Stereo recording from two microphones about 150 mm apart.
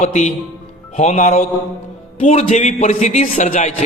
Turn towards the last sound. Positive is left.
turn(degrees=55)  # may be behind; listen again after turning